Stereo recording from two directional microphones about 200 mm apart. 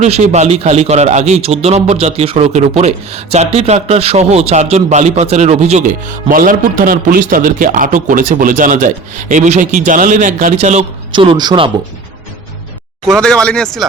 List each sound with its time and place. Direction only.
0.0 s a man's voice: 35° right (ahead or behind)
11.1 s speech: 25° right (ahead or behind)
13.1 s speech: 5° left (ahead or behind)